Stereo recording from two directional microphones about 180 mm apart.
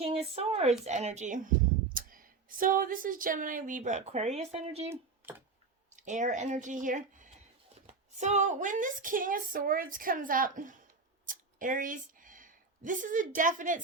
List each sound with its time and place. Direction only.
0.0 s a sound: 35° right (ahead or behind)
0.9 s speech: 40° right (ahead or behind)
4.9 s speech: 10° right (ahead or behind)
6.0 s a woman's voice: 45° right (ahead or behind)